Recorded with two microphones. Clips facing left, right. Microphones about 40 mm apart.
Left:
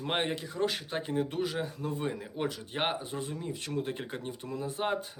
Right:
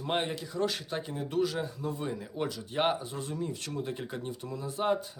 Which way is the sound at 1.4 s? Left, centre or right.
Left.